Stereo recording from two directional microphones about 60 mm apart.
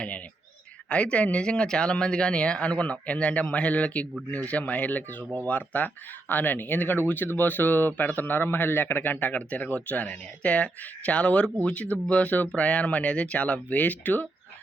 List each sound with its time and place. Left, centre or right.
0.9 s speech: centre